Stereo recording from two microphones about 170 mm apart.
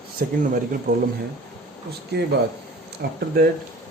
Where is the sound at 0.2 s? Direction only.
60° right (ahead or behind).